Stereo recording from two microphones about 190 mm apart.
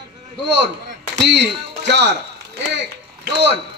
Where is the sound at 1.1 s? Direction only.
65° right (ahead or behind).